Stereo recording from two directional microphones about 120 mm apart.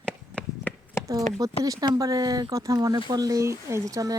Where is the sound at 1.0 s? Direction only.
20° left (ahead or behind).